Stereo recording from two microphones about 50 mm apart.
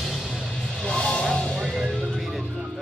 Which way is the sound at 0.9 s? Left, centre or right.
Centre.